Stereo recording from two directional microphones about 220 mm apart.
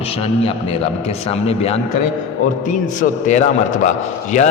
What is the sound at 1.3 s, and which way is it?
Mantra, 25° left (ahead or behind).